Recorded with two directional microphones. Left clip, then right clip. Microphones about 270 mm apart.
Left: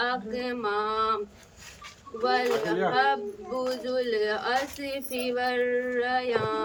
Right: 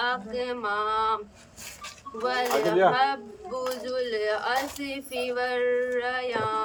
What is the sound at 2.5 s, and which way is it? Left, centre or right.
Speech, right.